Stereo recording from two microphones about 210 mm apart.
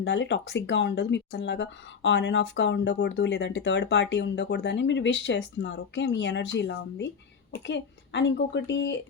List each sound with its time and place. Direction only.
0.0 s speech: 55° left (ahead or behind)